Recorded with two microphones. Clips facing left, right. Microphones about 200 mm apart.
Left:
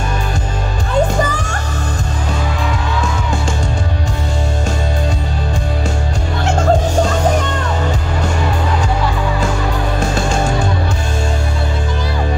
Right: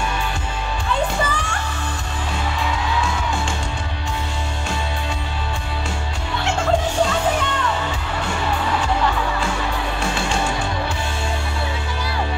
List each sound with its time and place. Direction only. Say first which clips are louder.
0.8 s music: left 7 dB; 45° left (ahead or behind)
6.4 s music: left 5 dB; 45° left (ahead or behind)
9.9 s music: left 6 dB; 40° left (ahead or behind)